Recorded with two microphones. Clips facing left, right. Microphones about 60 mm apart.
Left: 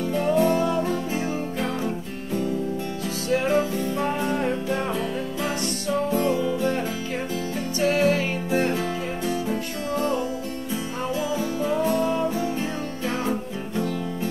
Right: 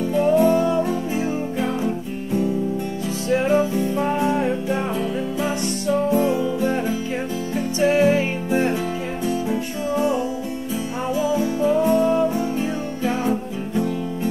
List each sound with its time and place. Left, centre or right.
0.4 s music: centre
3.5 s music: centre
13.0 s music: centre
13.3 s music: right